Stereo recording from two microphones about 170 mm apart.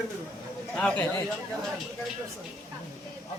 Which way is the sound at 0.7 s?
5° left (ahead or behind).